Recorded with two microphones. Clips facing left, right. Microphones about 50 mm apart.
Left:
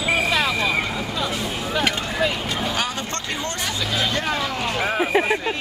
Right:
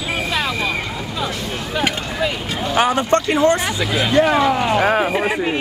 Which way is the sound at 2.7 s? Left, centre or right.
Right.